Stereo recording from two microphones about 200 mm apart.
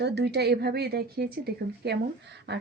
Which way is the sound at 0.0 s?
55° right (ahead or behind).